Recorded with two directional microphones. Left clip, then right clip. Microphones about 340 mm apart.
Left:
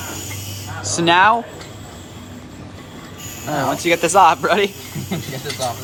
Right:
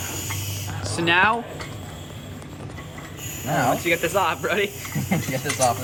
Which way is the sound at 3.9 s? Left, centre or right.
Centre.